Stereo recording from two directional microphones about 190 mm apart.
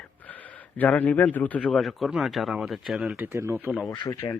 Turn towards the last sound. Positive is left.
turn(degrees=20)  # may be behind; listen again after turning